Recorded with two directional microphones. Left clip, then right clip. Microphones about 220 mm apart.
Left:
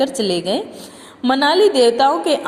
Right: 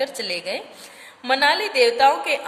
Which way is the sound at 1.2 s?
15° left (ahead or behind).